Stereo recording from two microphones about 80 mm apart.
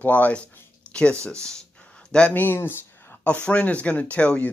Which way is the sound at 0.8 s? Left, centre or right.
Centre.